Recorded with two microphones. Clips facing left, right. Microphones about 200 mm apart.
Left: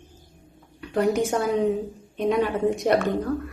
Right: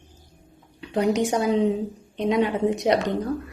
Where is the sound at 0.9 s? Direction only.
20° right (ahead or behind).